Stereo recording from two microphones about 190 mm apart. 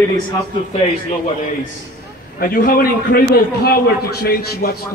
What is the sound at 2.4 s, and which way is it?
A man's voice, 50° left (ahead or behind).